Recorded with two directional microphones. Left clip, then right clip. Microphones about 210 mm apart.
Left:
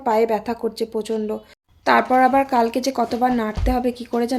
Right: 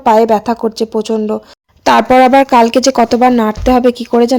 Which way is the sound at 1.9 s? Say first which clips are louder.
Right 8 dB; 40° right (ahead or behind).